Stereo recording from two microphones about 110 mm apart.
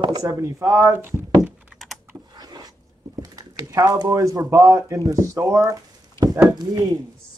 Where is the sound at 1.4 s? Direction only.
5° right (ahead or behind).